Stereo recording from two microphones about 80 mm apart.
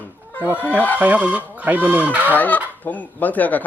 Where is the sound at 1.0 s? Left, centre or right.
Centre.